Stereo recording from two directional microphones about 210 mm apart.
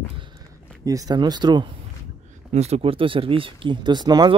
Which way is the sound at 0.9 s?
15° right (ahead or behind).